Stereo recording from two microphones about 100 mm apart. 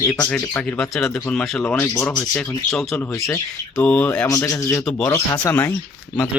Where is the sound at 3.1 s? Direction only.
30° left (ahead or behind).